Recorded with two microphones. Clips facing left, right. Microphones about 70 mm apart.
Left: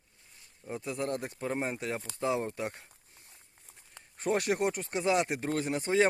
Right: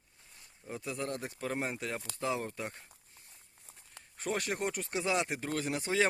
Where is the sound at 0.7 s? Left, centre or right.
Centre.